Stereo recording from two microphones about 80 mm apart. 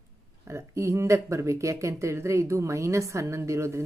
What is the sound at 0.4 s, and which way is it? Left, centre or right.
Speech, right.